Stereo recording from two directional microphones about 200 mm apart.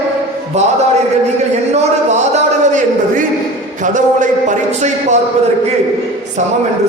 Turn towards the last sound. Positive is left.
turn(degrees=-35)  # may be behind; listen again after turning